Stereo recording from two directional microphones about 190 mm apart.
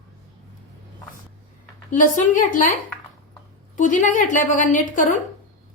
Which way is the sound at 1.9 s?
45° left (ahead or behind).